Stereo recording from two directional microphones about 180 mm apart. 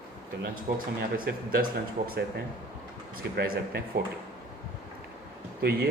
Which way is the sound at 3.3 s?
65° right (ahead or behind).